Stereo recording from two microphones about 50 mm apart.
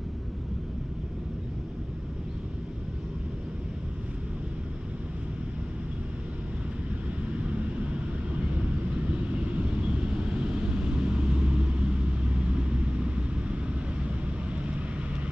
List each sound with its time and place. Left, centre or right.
9.3 s vehicle: right